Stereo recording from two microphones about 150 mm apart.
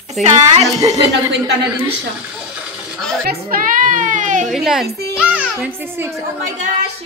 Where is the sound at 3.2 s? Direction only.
70° right (ahead or behind); by 4.5 s 55° right (ahead or behind).